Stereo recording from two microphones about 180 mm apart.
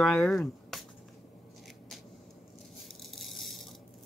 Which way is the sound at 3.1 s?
Centre (ahead or behind).